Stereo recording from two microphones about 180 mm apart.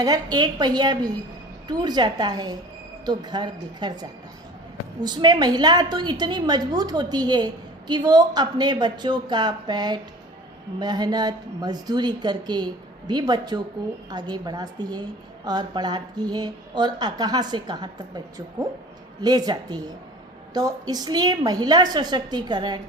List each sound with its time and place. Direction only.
0.0 s a woman's voice: 20° right (ahead or behind)
5.0 s a woman's voice: 25° right (ahead or behind)